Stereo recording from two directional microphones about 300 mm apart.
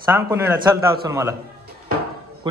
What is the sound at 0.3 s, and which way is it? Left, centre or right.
A man's voice, centre.